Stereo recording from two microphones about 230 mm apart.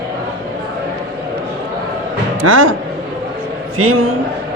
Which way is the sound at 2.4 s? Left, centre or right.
Right.